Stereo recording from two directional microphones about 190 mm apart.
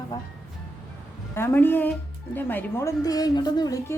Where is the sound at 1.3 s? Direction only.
10° left (ahead or behind).